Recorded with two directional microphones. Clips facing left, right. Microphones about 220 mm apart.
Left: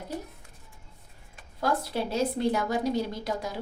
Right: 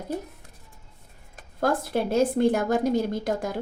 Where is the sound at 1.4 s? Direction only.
50° right (ahead or behind).